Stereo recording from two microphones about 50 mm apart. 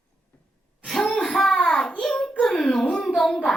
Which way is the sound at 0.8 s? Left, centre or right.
Centre.